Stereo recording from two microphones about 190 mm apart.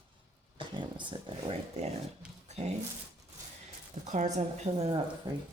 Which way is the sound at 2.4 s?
35° right (ahead or behind).